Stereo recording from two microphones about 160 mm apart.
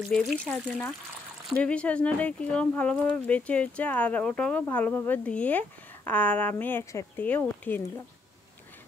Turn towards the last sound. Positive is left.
turn(degrees=10)  # may be behind; listen again after turning